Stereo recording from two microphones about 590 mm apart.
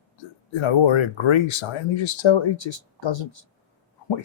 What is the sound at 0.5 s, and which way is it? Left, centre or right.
Speech, left.